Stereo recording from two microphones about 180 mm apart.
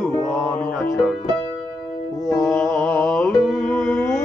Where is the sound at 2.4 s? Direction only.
5° left (ahead or behind).